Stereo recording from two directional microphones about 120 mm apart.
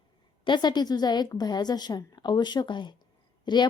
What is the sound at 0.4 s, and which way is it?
A woman's voice, 40° left (ahead or behind).